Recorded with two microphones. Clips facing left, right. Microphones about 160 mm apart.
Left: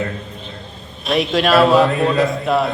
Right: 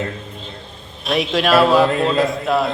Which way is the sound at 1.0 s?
Centre (ahead or behind).